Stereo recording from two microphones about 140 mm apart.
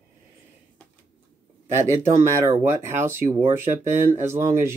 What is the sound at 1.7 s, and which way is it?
Speech, 20° right (ahead or behind).